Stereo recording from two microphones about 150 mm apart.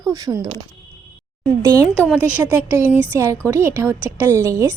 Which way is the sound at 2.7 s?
20° right (ahead or behind).